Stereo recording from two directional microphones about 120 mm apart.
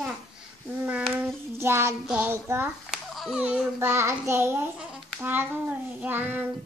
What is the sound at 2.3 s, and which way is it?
Speech, 20° right (ahead or behind).